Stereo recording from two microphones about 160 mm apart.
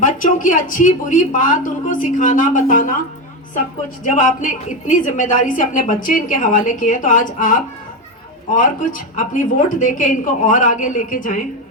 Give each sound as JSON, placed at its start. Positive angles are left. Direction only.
{"t": 0.0, "sound": "a woman's voice", "side_deg": 55}
{"t": 4.1, "sound": "a woman's voice", "side_deg": 50}